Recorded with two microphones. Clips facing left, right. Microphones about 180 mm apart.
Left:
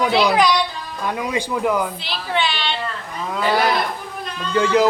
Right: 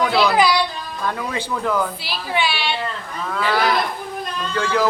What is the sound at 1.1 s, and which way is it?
Speech, 15° left (ahead or behind).